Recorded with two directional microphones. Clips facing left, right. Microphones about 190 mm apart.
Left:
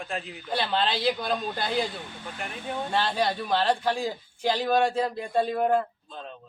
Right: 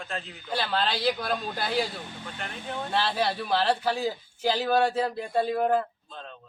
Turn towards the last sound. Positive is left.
turn(degrees=0)  # may be behind; listen again after turning